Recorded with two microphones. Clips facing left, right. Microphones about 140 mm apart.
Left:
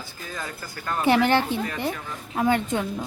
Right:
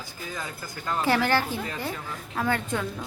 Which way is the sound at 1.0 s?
20° left (ahead or behind).